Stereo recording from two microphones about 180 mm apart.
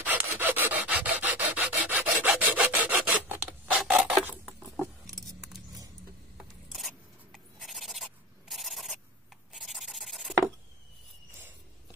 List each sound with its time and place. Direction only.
0.0 s rub: 10° right (ahead or behind)
3.8 s filing: centre (ahead or behind)
6.7 s a sound: centre (ahead or behind)